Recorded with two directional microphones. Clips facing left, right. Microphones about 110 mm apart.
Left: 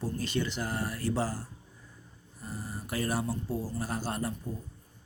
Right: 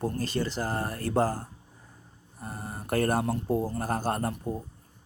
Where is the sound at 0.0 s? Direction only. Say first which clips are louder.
Right 4 dB; 55° right (ahead or behind).